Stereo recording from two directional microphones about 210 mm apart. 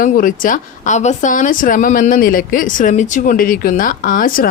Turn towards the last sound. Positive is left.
turn(degrees=40)  # may be behind; listen again after turning